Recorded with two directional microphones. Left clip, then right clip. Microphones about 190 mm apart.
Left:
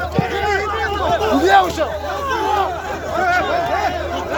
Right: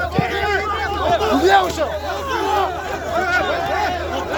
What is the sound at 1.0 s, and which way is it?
Speech, 20° right (ahead or behind).